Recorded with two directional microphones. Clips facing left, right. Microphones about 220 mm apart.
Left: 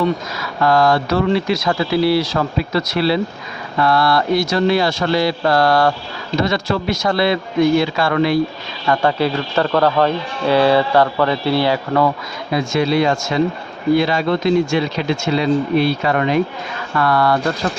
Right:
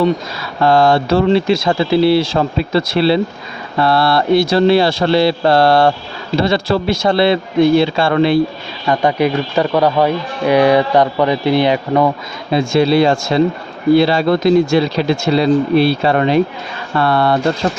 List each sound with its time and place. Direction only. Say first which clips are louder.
0.0 s speech: right 4 dB; 30° right (ahead or behind)
8.9 s speech: right 3 dB; 15° right (ahead or behind)